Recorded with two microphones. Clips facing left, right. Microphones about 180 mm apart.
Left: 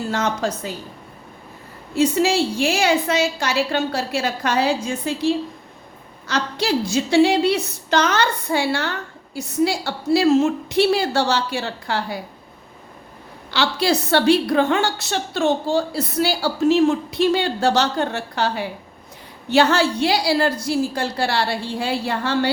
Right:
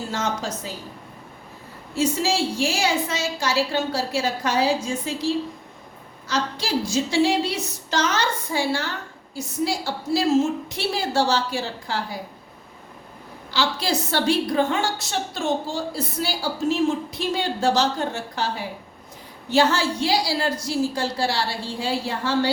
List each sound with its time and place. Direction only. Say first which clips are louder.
0.1 s a woman's voice: left 4 dB; 65° left (ahead or behind)
2.0 s a woman's voice: left 5 dB; 60° left (ahead or behind)
13.5 s a woman's voice: left 4 dB; 70° left (ahead or behind)